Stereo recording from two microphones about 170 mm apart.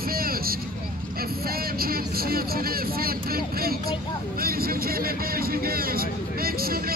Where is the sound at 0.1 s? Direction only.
60° right (ahead or behind).